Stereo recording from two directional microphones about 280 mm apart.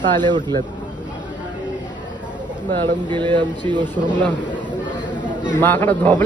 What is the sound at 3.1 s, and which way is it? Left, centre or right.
Speech, centre.